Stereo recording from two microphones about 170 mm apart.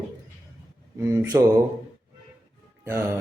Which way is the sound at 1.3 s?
15° right (ahead or behind).